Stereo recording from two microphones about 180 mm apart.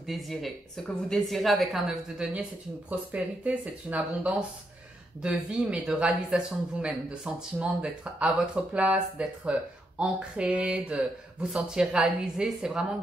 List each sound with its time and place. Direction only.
0.0 s speech: centre (ahead or behind)